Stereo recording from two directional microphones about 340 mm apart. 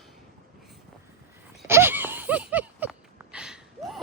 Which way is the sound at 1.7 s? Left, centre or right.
Centre.